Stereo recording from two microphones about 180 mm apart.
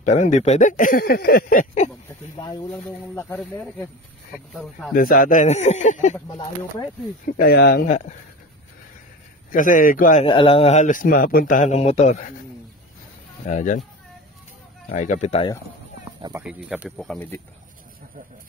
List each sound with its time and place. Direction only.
0.0 s speech: 45° left (ahead or behind)
2.7 s speech: 10° left (ahead or behind)
4.3 s speech: centre (ahead or behind)
4.9 s speech: 50° left (ahead or behind)
6.1 s speech: 20° left (ahead or behind)
7.2 s speech: 55° left (ahead or behind)
7.8 s speech: 40° left (ahead or behind)
9.5 s speech: 45° left (ahead or behind)
10.2 s a man's voice: 30° left (ahead or behind)
13.5 s speech: 45° left (ahead or behind)
15.0 s speech: 40° left (ahead or behind)
16.3 s speech: 5° right (ahead or behind)